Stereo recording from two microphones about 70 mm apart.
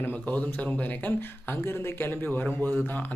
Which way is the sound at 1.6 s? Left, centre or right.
Left.